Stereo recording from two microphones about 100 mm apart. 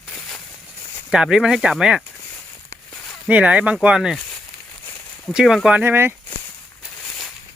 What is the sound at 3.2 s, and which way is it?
Speech, 10° right (ahead or behind).